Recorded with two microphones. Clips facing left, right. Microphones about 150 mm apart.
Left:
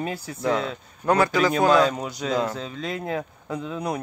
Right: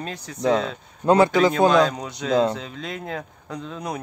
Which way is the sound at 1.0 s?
25° right (ahead or behind).